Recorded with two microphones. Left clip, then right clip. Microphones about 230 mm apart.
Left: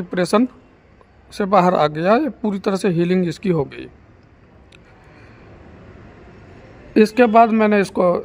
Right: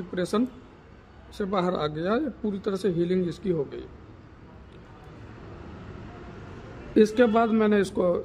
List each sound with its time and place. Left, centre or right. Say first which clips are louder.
0.1 s speech: left 10 dB; left
6.9 s speech: left 7 dB; left